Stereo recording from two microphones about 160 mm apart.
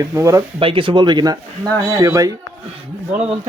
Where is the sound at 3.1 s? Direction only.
45° right (ahead or behind).